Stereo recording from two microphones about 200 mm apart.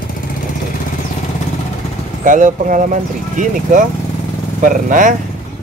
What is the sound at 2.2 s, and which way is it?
Speech, 40° right (ahead or behind).